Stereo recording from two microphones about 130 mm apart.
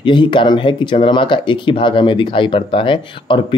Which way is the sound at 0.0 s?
35° left (ahead or behind).